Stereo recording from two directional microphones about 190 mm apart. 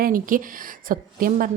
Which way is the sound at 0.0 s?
45° right (ahead or behind).